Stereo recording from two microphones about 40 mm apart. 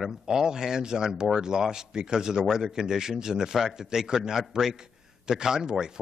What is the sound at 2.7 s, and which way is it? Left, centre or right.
A man's voice, centre.